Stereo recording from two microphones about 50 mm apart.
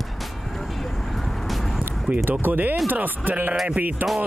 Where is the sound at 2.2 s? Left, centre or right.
Right.